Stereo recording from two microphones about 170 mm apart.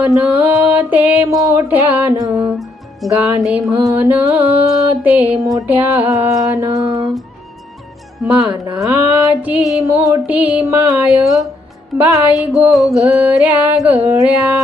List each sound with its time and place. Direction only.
0.0 s mantra: 10° right (ahead or behind)
8.2 s mantra: 10° right (ahead or behind)
11.9 s speech: 5° right (ahead or behind)
13.1 s mantra: 10° right (ahead or behind)